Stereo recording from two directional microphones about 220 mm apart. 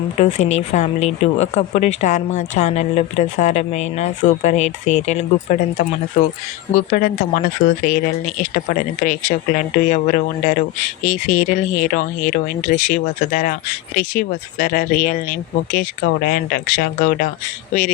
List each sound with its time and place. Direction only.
0.2 s speech: 30° left (ahead or behind)